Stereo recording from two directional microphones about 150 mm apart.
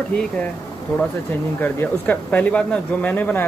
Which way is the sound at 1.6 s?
10° left (ahead or behind).